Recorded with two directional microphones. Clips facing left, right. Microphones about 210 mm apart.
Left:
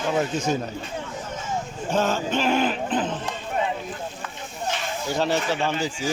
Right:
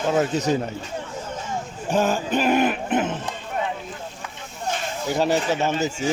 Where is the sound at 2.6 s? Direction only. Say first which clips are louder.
Right 2 dB; 55° right (ahead or behind).